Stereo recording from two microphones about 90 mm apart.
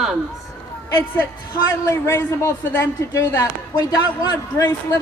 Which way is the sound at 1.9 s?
30° left (ahead or behind).